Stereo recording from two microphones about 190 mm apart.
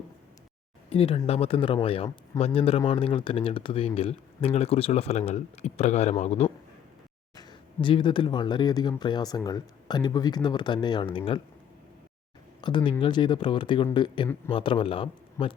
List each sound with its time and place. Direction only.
0.9 s speech: 30° left (ahead or behind)
12.6 s speech: 25° left (ahead or behind)